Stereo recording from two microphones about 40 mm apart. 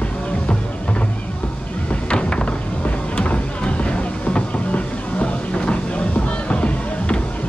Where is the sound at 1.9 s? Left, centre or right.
Left.